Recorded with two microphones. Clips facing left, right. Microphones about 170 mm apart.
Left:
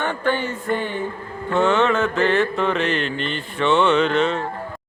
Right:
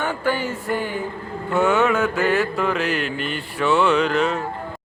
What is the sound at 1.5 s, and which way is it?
Speech, 5° right (ahead or behind).